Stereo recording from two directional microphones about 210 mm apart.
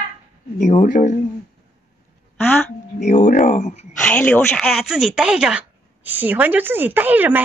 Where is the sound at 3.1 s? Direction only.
35° left (ahead or behind).